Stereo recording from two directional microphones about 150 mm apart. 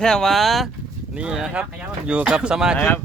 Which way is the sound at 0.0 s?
5° left (ahead or behind).